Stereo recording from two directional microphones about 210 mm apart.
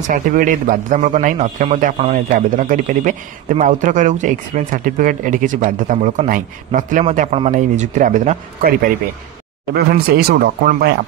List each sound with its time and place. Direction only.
0.1 s a man's voice: 40° right (ahead or behind)